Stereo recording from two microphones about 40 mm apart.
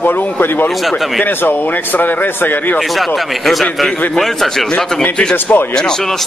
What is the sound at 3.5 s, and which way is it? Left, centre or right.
A man's voice, centre.